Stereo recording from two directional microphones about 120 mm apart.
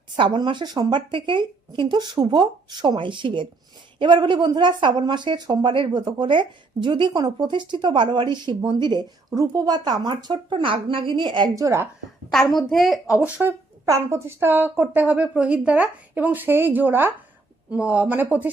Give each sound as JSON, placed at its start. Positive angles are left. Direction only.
{"t": 0.2, "sound": "speech", "side_deg": -40}
{"t": 11.5, "sound": "a woman's voice", "side_deg": -25}
{"t": 12.3, "sound": "a woman's voice", "side_deg": 5}
{"t": 13.8, "sound": "a woman's voice", "side_deg": -25}